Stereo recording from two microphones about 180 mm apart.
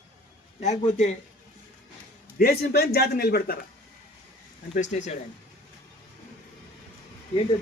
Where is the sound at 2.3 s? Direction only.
60° left (ahead or behind).